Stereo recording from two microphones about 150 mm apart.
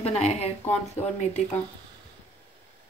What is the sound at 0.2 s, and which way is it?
Speech, 45° left (ahead or behind).